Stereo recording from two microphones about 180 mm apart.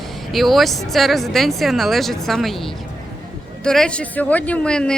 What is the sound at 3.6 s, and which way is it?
Speech, 5° left (ahead or behind).